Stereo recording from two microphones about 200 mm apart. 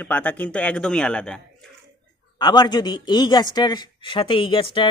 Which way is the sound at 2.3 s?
20° left (ahead or behind).